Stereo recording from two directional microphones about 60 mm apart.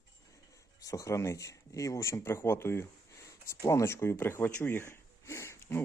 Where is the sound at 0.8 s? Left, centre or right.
Left.